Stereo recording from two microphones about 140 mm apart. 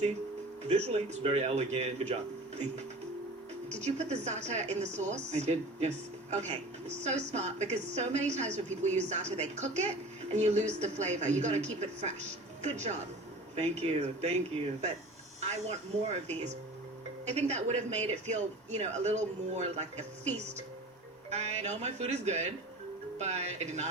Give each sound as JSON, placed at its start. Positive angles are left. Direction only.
{"t": 0.7, "sound": "a woman's voice", "side_deg": -50}
{"t": 3.7, "sound": "a woman's voice", "side_deg": -50}
{"t": 15.4, "sound": "a woman's voice", "side_deg": -50}